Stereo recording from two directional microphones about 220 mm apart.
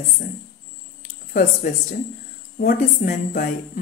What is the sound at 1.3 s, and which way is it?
A woman's voice, 40° left (ahead or behind).